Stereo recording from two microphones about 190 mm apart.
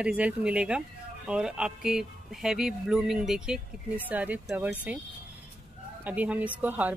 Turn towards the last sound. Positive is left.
turn(degrees=-10)  # may be behind; listen again after turning